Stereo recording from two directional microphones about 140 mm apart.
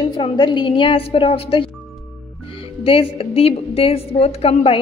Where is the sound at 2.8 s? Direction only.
40° left (ahead or behind).